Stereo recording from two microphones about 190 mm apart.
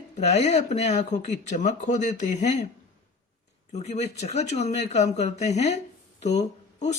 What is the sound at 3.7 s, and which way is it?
Speech, 35° left (ahead or behind).